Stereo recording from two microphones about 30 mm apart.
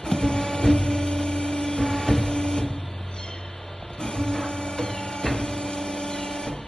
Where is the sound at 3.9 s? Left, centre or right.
Left.